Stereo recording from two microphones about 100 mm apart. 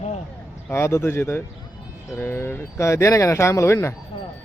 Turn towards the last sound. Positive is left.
turn(degrees=30)  # may be behind; listen again after turning